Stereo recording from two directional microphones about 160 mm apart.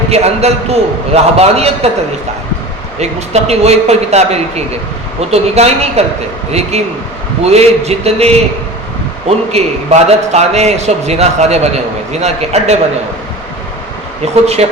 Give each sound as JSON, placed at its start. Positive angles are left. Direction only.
{"t": 0.1, "sound": "a man's voice", "side_deg": -40}
{"t": 3.0, "sound": "a man's voice", "side_deg": -40}
{"t": 9.5, "sound": "a man's voice", "side_deg": -40}
{"t": 14.4, "sound": "a man's voice", "side_deg": -40}